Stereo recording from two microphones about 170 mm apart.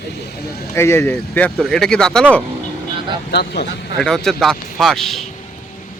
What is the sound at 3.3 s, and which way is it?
Speech, 70° left (ahead or behind).